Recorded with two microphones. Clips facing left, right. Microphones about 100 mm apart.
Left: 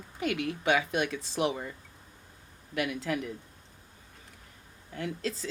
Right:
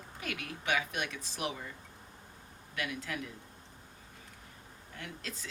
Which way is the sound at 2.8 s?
25° left (ahead or behind).